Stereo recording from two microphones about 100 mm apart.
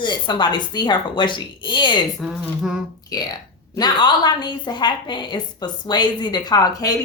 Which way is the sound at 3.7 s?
45° left (ahead or behind).